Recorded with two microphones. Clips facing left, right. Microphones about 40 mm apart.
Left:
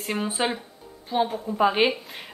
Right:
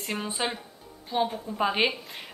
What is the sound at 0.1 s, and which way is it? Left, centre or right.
Speech, centre.